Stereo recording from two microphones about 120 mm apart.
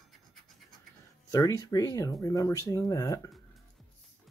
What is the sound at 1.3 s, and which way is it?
Speech, 25° left (ahead or behind).